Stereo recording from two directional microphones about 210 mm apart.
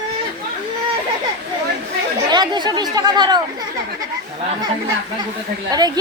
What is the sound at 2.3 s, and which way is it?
Speech, 20° right (ahead or behind).